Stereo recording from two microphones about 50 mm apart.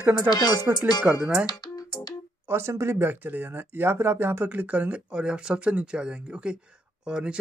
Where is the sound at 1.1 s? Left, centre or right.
Centre.